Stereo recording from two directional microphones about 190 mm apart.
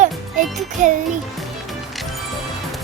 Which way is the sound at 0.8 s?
40° right (ahead or behind).